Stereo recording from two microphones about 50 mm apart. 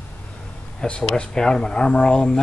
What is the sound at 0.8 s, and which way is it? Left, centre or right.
Speech, centre.